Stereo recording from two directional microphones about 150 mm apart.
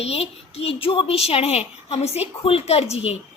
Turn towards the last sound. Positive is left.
turn(degrees=40)  # may be behind; listen again after turning